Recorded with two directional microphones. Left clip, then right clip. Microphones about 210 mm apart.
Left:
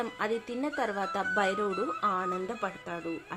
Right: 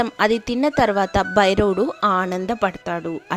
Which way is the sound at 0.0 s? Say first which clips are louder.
Right 13 dB; 45° right (ahead or behind).